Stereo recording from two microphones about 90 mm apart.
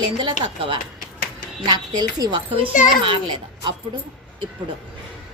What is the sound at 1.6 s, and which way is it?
Speech, 50° right (ahead or behind).